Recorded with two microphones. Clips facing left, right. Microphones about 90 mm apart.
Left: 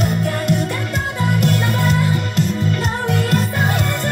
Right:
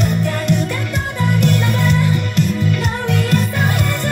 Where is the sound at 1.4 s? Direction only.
35° left (ahead or behind).